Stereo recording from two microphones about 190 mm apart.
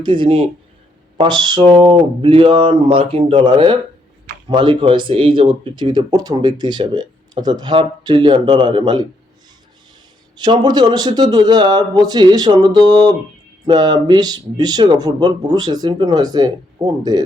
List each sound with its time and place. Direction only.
0.0 s speech: 25° right (ahead or behind)
10.3 s speech: 25° right (ahead or behind)